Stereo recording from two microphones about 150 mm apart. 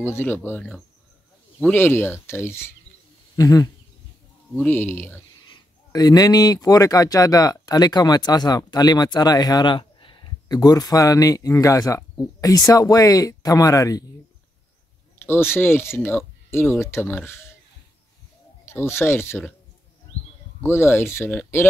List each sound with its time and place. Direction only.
0.0 s speech: 15° left (ahead or behind)
4.6 s speech: 15° left (ahead or behind)
5.9 s speech: 25° left (ahead or behind)
15.2 s speech: 15° left (ahead or behind)
18.7 s speech: 15° left (ahead or behind)
20.1 s a sound: 40° left (ahead or behind)
20.6 s speech: 15° left (ahead or behind)